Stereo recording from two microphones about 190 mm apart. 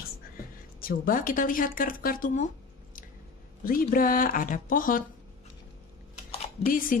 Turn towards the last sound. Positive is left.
turn(degrees=45)  # may be behind; listen again after turning